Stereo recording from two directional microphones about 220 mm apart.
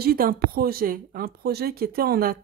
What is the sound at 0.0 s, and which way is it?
Speech, 40° right (ahead or behind).